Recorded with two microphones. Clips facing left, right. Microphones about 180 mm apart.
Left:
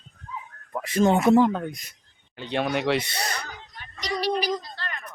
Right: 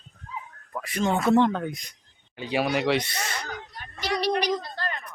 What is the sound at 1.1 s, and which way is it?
Speech, 15° left (ahead or behind).